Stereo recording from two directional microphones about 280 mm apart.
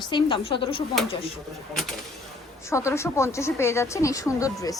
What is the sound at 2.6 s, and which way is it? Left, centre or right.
A woman's voice, centre.